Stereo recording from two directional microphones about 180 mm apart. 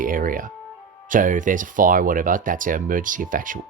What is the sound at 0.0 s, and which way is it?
Speech, 50° right (ahead or behind).